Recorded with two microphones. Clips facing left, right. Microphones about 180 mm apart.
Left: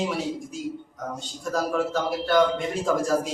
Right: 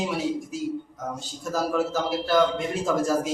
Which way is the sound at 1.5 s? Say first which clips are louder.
Even; centre (ahead or behind).